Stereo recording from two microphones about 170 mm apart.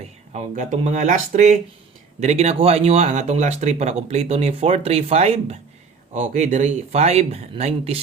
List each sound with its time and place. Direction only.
0.3 s speech: 45° right (ahead or behind)